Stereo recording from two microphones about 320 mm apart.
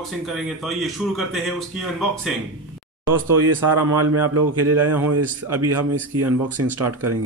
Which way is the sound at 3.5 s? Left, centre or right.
Right.